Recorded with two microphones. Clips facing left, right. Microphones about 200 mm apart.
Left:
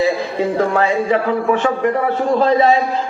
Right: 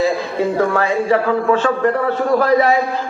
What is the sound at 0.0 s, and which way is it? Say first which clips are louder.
A man's voice: even; 20° left (ahead or behind).